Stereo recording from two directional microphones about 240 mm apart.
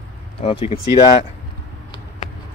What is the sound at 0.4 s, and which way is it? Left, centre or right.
Speech, left.